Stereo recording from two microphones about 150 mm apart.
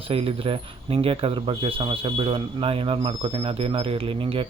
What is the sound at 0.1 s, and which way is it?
Speech, 40° right (ahead or behind).